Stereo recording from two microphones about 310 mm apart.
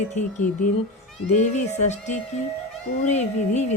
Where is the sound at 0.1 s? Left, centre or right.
Left.